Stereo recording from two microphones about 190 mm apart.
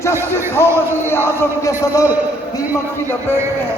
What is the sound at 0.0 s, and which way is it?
Speech, 15° left (ahead or behind).